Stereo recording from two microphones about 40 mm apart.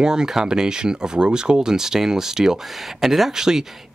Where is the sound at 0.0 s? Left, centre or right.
Centre.